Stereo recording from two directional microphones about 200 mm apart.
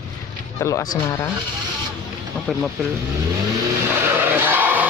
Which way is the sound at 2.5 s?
5° left (ahead or behind).